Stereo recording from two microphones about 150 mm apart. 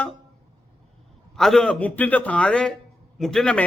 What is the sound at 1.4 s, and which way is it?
A man's voice, centre (ahead or behind).